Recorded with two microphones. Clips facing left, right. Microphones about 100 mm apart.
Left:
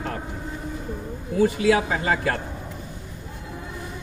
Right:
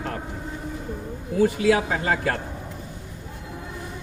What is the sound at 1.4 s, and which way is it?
Speech, 50° right (ahead or behind).